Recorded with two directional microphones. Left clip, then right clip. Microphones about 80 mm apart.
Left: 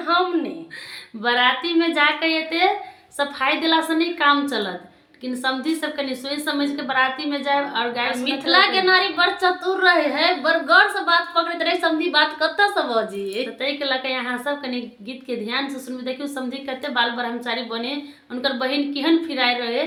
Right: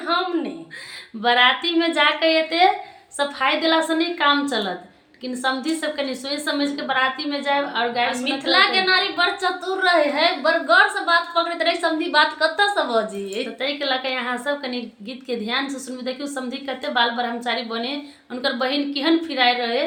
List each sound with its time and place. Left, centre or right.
0.1 s a sound: left
1.2 s a woman's voice: right
8.5 s a woman's voice: left
13.6 s a woman's voice: centre